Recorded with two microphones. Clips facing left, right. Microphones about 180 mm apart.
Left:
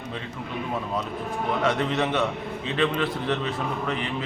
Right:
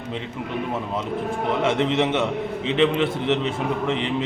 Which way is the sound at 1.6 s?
20° right (ahead or behind).